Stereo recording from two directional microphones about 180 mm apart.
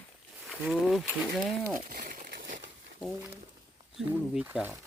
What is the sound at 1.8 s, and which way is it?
Crumpling, 50° right (ahead or behind).